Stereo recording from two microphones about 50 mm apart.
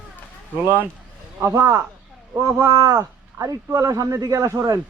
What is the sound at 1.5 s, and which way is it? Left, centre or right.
A man's voice, right.